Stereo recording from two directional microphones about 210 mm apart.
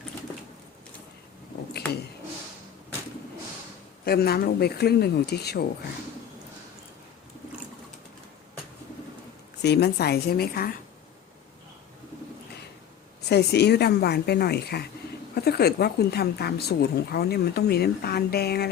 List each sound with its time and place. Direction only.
4.0 s speech: 45° left (ahead or behind)
9.6 s speech: 50° left (ahead or behind)
13.2 s speech: 50° left (ahead or behind)